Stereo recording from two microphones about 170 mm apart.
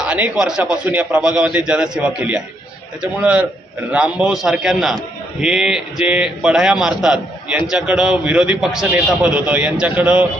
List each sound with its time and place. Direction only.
0.0 s a man's voice: 5° right (ahead or behind)